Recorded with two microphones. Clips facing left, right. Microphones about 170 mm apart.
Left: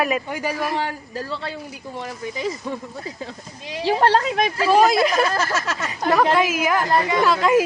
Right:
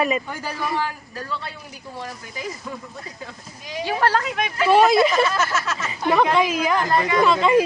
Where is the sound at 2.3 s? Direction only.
25° left (ahead or behind).